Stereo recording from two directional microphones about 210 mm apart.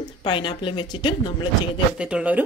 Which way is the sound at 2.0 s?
5° right (ahead or behind).